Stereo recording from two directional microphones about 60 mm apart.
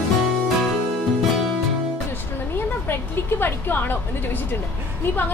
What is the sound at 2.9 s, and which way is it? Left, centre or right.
A woman's voice, left.